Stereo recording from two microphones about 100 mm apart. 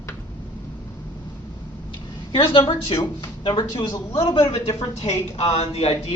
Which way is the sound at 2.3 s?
65° left (ahead or behind).